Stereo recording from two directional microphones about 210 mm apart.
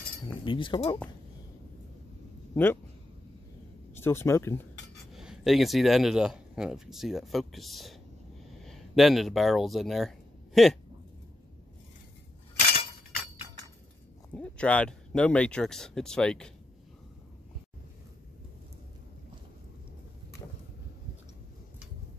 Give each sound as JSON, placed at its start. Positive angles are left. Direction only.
{"t": 0.3, "sound": "speech", "side_deg": 25}
{"t": 2.5, "sound": "speech", "side_deg": 10}
{"t": 3.9, "sound": "speech", "side_deg": 10}
{"t": 5.1, "sound": "speech", "side_deg": 0}
{"t": 14.3, "sound": "speech", "side_deg": 5}